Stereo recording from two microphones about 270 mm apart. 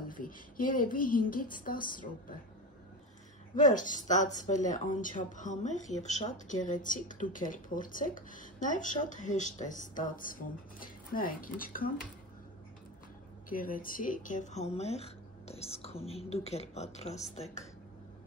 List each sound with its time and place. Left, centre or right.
0.1 s speech: left
3.5 s speech: left
13.5 s speech: left